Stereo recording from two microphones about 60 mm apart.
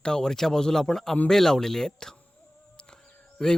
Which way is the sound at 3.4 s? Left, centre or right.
Centre.